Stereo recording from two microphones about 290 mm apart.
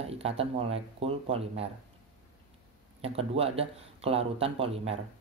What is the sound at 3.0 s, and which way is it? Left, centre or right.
Speech, centre.